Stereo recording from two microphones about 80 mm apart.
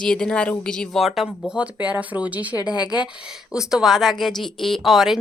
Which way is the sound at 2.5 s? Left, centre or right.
Left.